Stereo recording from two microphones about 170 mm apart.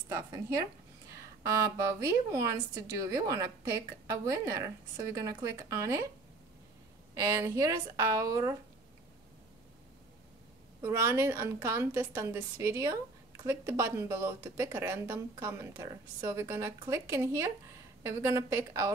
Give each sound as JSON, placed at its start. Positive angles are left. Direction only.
{"t": 0.1, "sound": "a woman's voice", "side_deg": -20}
{"t": 7.2, "sound": "a woman's voice", "side_deg": -20}
{"t": 10.8, "sound": "a woman's voice", "side_deg": -15}